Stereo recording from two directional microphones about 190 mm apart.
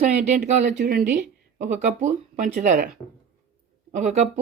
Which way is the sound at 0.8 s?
50° right (ahead or behind).